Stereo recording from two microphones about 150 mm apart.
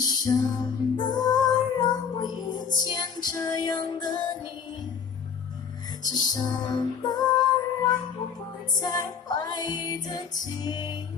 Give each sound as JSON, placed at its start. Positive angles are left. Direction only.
{"t": 0.0, "sound": "music", "side_deg": 25}
{"t": 6.0, "sound": "music", "side_deg": 25}